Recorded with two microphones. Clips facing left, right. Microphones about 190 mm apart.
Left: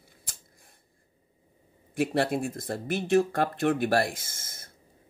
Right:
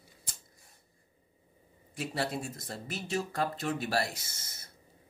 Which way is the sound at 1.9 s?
55° left (ahead or behind).